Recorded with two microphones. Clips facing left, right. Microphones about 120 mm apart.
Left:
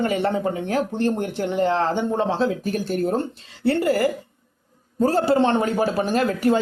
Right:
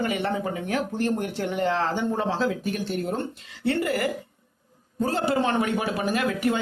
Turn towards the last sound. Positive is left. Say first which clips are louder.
# left 4 dB
turn(degrees=35)  # may be behind; listen again after turning